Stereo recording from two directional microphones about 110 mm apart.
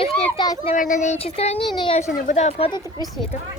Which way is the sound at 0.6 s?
75° left (ahead or behind).